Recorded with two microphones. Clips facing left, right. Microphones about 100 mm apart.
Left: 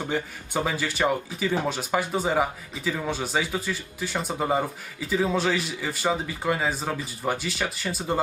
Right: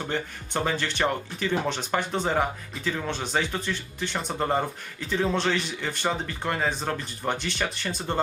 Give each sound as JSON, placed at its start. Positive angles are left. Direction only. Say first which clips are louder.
{"t": 0.0, "sound": "speech", "louder": "left 2 dB", "side_deg": 5}